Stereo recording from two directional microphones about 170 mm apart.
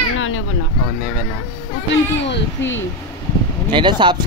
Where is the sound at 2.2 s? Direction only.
90° left.